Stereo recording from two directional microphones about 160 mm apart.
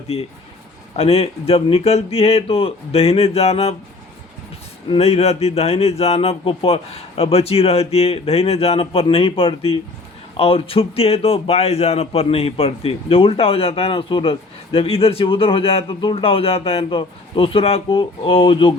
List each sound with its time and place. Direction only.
0.9 s a man's voice: 40° left (ahead or behind)
4.9 s a man's voice: 40° left (ahead or behind)